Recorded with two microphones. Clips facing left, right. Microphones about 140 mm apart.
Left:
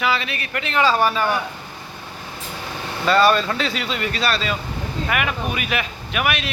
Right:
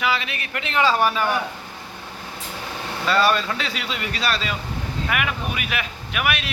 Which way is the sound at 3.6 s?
10° right (ahead or behind).